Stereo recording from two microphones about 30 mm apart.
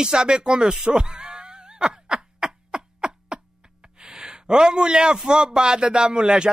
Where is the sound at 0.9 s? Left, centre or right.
Right.